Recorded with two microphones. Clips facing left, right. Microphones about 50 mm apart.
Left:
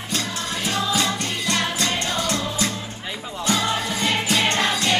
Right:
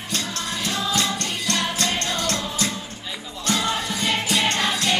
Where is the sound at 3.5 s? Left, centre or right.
Centre.